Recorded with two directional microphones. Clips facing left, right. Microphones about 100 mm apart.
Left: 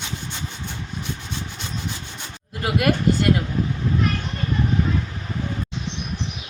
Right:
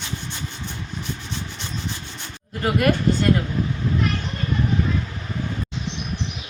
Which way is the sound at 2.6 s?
10° left (ahead or behind).